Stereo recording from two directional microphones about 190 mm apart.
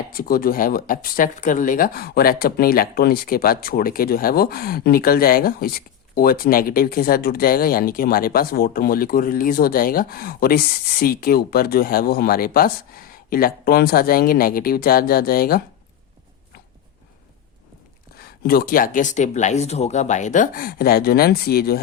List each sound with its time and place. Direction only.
0.1 s speech: 50° left (ahead or behind)
18.2 s speech: 50° left (ahead or behind)